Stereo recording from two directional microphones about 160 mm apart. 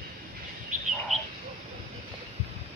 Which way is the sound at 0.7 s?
55° right (ahead or behind).